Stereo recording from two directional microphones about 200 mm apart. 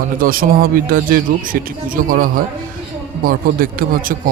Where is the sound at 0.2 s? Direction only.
45° right (ahead or behind).